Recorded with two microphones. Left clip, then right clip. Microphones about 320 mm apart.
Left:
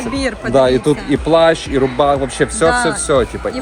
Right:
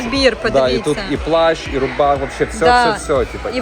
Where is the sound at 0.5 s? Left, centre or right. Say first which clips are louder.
Left 2 dB; left.